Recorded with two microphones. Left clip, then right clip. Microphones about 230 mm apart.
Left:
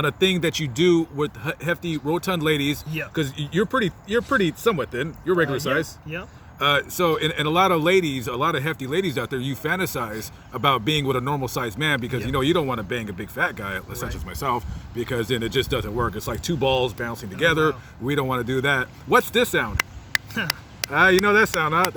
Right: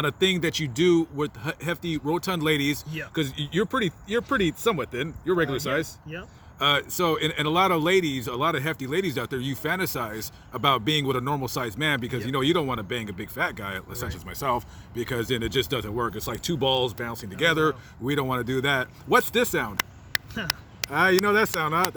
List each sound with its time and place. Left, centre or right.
0.0 s speech: right
20.1 s a sound: centre
20.5 s speech: centre